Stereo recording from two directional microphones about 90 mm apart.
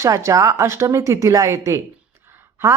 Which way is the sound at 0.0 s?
35° right (ahead or behind).